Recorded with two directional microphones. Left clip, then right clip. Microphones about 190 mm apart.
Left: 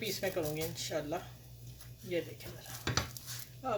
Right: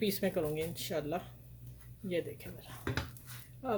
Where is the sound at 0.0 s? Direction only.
65° right (ahead or behind).